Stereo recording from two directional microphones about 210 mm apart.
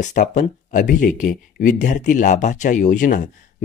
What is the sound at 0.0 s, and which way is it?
Speech, 35° left (ahead or behind).